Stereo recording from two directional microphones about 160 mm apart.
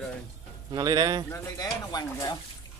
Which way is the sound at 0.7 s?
25° right (ahead or behind).